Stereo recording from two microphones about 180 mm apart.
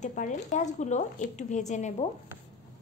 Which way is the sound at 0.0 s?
45° left (ahead or behind).